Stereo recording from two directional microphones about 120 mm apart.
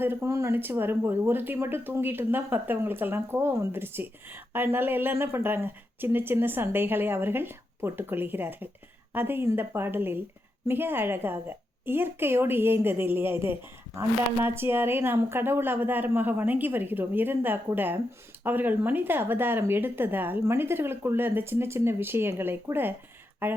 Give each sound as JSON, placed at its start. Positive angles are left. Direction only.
{"t": 0.0, "sound": "a woman's voice", "side_deg": -20}